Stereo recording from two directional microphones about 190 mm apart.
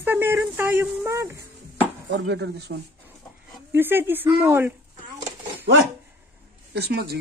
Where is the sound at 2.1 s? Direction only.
65° right (ahead or behind).